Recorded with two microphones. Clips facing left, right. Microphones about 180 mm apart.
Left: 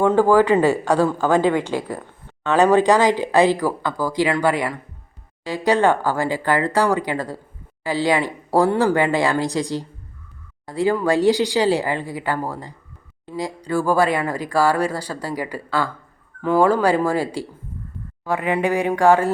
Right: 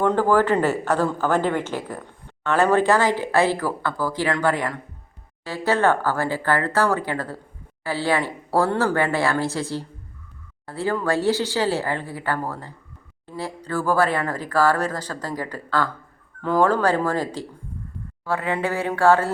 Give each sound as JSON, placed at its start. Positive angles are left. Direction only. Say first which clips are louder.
{"t": 0.0, "sound": "speech", "louder": "left 4 dB", "side_deg": 10}